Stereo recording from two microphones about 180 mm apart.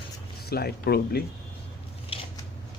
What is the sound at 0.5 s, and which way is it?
Speech, 60° left (ahead or behind).